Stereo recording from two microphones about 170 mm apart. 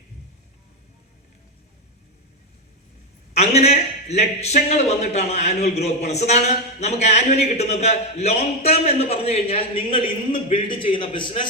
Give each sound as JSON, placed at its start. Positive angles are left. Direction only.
{"t": 3.3, "sound": "a man's voice", "side_deg": 40}